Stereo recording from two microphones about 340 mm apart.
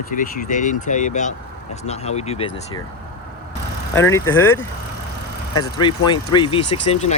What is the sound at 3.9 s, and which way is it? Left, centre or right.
Speech, centre.